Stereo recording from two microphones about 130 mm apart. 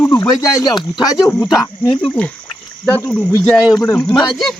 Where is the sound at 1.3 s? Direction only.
20° left (ahead or behind).